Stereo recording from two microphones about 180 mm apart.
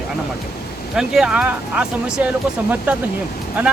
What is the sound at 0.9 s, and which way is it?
Speech, 5° right (ahead or behind).